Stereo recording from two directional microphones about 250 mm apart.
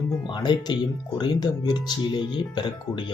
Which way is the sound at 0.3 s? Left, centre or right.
Centre.